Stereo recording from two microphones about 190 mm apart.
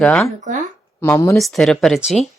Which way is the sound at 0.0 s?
5° left (ahead or behind).